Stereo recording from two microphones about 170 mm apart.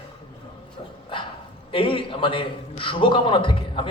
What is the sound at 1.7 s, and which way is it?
A man's voice, 30° left (ahead or behind).